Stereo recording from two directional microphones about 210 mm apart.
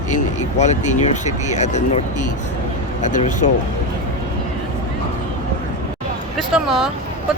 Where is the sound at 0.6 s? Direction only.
35° left (ahead or behind).